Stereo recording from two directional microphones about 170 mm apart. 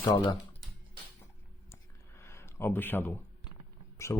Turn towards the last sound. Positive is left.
turn(degrees=15)  # may be behind; listen again after turning